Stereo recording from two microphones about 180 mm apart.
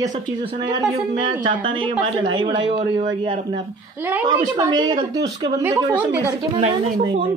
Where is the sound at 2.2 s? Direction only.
25° right (ahead or behind).